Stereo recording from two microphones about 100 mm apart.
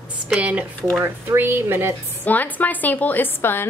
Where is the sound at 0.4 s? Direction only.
15° right (ahead or behind).